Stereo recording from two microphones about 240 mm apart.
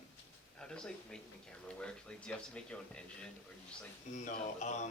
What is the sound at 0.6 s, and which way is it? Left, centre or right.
Speech, centre.